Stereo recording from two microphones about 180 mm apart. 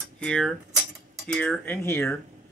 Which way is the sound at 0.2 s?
5° left (ahead or behind).